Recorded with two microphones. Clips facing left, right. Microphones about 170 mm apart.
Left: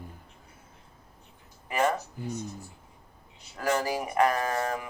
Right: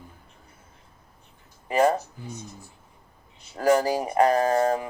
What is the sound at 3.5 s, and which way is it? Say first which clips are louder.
Speech: right 7 dB; 35° right (ahead or behind).